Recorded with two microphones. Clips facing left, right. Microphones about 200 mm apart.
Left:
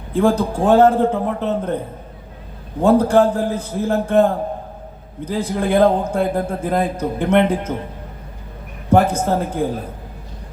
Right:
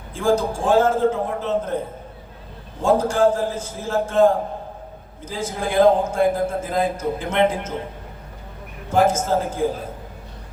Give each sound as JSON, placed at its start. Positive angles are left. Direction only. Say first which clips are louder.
{"t": 0.1, "sound": "a man's voice", "louder": "left 3 dB", "side_deg": 60}
{"t": 2.8, "sound": "a man's voice", "louder": "left 4 dB", "side_deg": 60}
{"t": 8.9, "sound": "a man's voice", "louder": "left 3 dB", "side_deg": 60}